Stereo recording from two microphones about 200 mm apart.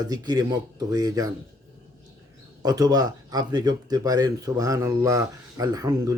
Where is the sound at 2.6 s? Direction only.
20° right (ahead or behind).